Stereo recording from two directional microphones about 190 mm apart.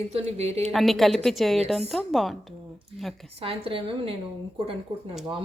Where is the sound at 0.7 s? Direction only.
Centre (ahead or behind).